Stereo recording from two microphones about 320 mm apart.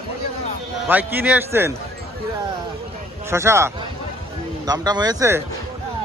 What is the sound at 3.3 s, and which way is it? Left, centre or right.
A man's voice, centre.